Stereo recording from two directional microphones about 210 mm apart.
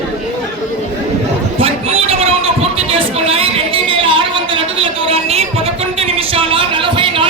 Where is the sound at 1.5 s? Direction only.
30° right (ahead or behind).